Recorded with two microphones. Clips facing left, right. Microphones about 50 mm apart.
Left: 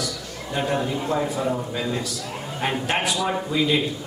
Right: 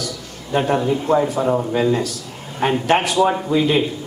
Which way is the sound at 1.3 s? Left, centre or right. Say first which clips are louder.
Right 6 dB; right.